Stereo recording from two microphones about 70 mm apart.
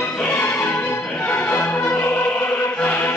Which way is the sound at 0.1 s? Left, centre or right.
Left.